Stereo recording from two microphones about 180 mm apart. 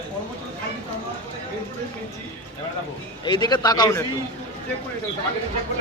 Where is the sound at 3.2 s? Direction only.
25° left (ahead or behind).